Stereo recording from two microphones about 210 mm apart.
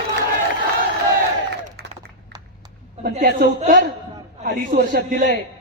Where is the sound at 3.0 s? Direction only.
45° right (ahead or behind).